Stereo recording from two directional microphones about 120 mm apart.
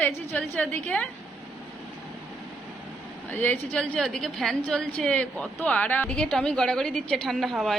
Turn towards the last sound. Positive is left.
turn(degrees=0)  # may be behind; listen again after turning